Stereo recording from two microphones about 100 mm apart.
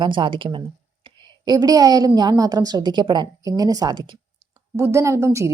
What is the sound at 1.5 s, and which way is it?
A woman's voice, 40° right (ahead or behind).